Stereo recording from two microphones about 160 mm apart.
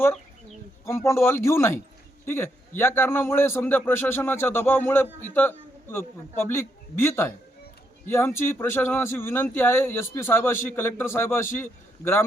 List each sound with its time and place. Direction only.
0.9 s a man's voice: 15° left (ahead or behind)